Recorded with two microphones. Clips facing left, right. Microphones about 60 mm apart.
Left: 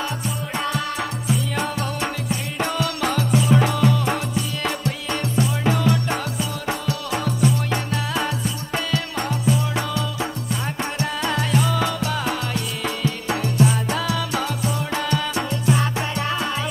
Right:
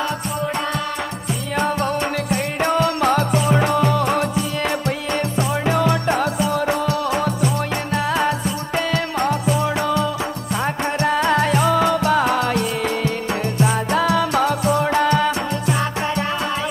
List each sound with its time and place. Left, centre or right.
1.8 s music: right
7.9 s music: right
12.4 s music: right
13.3 s music: right